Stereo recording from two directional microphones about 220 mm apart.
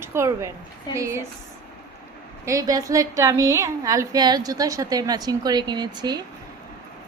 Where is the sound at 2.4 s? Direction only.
15° right (ahead or behind).